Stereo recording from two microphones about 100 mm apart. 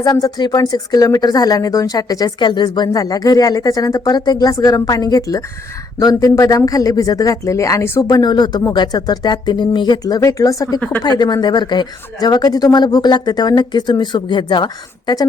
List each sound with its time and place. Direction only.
0.0 s speech: 40° left (ahead or behind)
8.1 s speech: 45° left (ahead or behind)